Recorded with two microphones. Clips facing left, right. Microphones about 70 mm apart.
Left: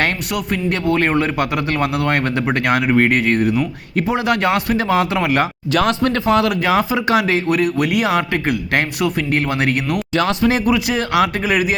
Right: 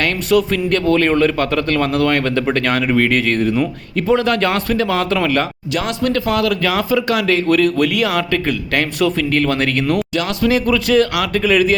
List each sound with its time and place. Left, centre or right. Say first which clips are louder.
0.3 s a man's voice: right 6 dB; centre
5.7 s speech: left 2 dB; left
9.0 s a man's voice: right 2 dB; centre
10.2 s speech: left 4 dB; left
10.7 s speech: right 3 dB; centre